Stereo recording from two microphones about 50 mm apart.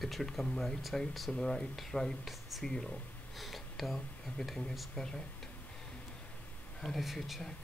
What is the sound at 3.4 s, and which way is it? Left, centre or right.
Speech, centre.